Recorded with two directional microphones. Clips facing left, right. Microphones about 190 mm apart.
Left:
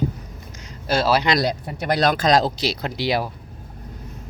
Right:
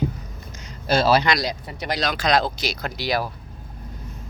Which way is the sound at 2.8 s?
25° left (ahead or behind).